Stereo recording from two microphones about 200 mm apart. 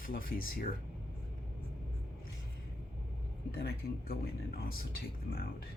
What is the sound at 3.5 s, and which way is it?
Speech, 50° left (ahead or behind).